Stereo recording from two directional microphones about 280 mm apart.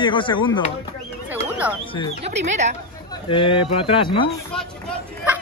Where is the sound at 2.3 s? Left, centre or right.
Right.